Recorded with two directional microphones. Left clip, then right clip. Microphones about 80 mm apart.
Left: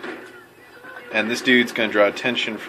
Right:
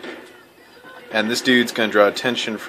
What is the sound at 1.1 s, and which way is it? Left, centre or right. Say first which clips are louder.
Speech: even; right.